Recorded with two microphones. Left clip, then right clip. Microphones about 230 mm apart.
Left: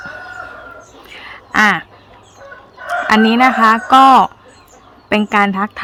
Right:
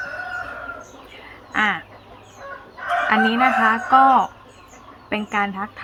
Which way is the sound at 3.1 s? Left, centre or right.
Left.